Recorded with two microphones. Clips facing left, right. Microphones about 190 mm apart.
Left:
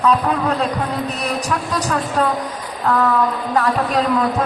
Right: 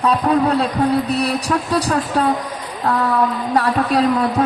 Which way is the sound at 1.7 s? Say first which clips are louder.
Right 1 dB; 35° right (ahead or behind).